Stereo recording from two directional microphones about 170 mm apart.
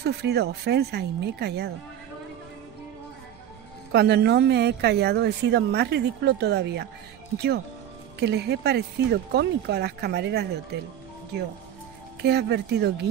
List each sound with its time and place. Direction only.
0.0 s a woman's voice: 70° right (ahead or behind)
3.9 s a woman's voice: 75° right (ahead or behind)
7.3 s a woman's voice: 70° right (ahead or behind)
12.2 s a woman's voice: 75° right (ahead or behind)